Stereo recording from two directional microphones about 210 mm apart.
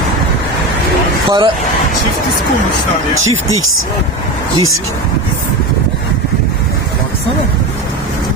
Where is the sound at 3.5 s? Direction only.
75° right (ahead or behind).